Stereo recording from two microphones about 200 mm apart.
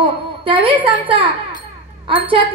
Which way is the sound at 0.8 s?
25° right (ahead or behind).